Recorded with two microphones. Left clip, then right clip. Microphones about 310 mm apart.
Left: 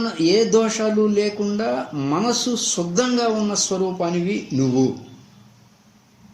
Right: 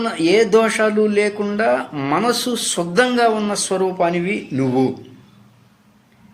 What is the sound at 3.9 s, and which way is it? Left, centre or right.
Speech, right.